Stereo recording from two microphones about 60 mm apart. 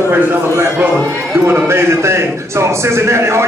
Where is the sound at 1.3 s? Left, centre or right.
Right.